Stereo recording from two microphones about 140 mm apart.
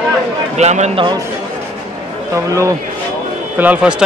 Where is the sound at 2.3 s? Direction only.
20° right (ahead or behind).